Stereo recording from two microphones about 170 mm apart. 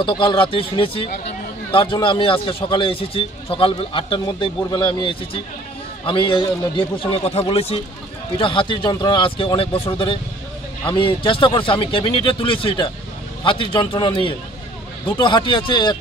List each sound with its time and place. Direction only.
0.0 s a man's voice: 30° left (ahead or behind)